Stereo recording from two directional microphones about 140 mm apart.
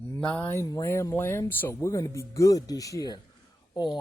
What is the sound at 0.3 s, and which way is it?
Speech, 20° left (ahead or behind).